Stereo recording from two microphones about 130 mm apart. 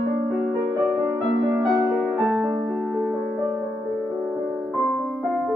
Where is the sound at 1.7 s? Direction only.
Centre (ahead or behind).